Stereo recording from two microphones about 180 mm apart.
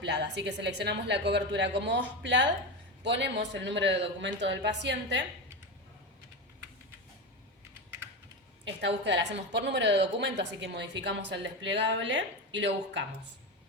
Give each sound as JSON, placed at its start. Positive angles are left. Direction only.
{"t": 0.0, "sound": "a woman's voice", "side_deg": -70}
{"t": 8.6, "sound": "a woman's voice", "side_deg": -75}